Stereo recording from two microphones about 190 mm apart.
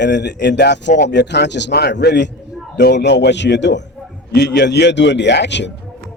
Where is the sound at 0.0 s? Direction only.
65° left (ahead or behind).